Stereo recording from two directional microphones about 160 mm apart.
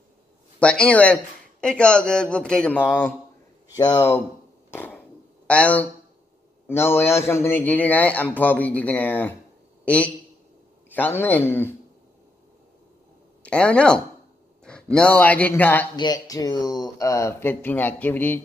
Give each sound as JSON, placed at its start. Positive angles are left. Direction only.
{"t": 0.6, "sound": "a man's voice", "side_deg": 5}
{"t": 4.6, "sound": "a sound", "side_deg": 10}
{"t": 5.5, "sound": "a man's voice", "side_deg": 10}
{"t": 7.1, "sound": "a man's voice", "side_deg": 15}
{"t": 13.4, "sound": "speech", "side_deg": 5}
{"t": 16.0, "sound": "a man's voice", "side_deg": 25}